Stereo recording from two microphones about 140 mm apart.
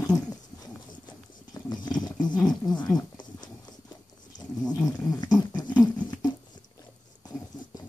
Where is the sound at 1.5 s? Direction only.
30° left (ahead or behind).